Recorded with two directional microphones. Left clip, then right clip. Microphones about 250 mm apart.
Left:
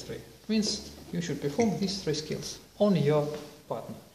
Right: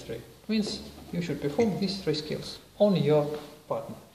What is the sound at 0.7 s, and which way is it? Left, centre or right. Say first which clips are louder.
A man's voice: left 2 dB; centre.